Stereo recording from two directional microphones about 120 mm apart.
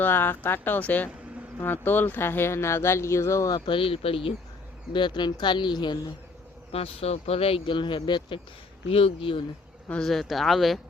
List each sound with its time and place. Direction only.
0.0 s speech: 15° left (ahead or behind)
3.7 s speech: 50° left (ahead or behind)
4.9 s speech: 40° left (ahead or behind)
6.7 s speech: 55° left (ahead or behind); by 8.4 s 40° left (ahead or behind)
8.9 s speech: 50° left (ahead or behind)
9.9 s speech: 5° left (ahead or behind)